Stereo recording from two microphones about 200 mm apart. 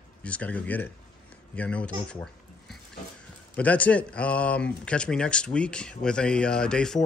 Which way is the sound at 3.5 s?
5° left (ahead or behind).